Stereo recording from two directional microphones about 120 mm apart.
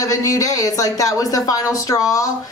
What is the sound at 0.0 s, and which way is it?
A woman's voice, 30° left (ahead or behind).